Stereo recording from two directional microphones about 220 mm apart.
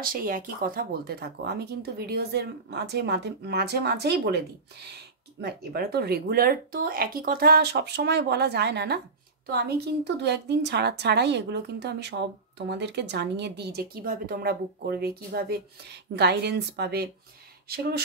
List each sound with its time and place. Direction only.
0.0 s a woman's voice: 40° right (ahead or behind)
5.4 s a woman's voice: 45° right (ahead or behind)